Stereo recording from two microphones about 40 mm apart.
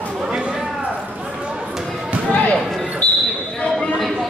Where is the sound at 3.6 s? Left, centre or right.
Left.